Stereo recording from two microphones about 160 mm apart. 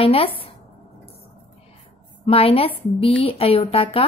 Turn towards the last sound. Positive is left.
turn(degrees=40)  # may be behind; listen again after turning